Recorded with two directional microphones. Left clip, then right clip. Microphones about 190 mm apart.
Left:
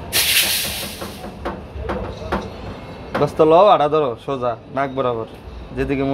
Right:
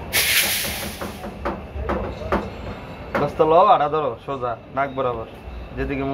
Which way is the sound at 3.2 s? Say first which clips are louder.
Left 3 dB; 60° left (ahead or behind).